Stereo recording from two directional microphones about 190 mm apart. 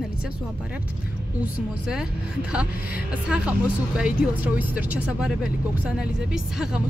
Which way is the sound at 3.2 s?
5° right (ahead or behind).